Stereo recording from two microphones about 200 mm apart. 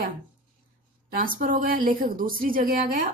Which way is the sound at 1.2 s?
45° right (ahead or behind).